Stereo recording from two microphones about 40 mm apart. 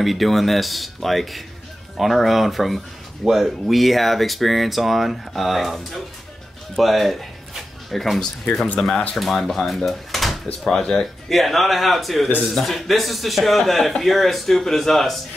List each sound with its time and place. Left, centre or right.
0.0 s speech: centre
10.8 s speech: centre
11.2 s speech: centre